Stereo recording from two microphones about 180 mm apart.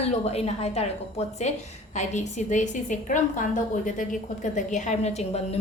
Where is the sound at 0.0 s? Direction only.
35° left (ahead or behind).